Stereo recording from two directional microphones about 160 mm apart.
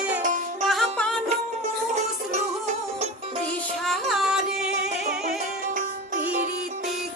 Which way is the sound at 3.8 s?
Centre (ahead or behind).